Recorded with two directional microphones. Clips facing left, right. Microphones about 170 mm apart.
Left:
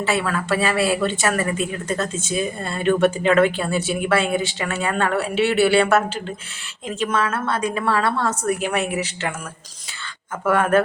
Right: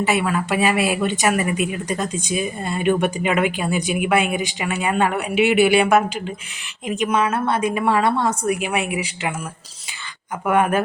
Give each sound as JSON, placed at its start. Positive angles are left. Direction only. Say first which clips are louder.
{"t": 0.0, "sound": "speech", "louder": "right 2 dB", "side_deg": -15}
{"t": 10.4, "sound": "speech", "louder": "left 1 dB", "side_deg": -15}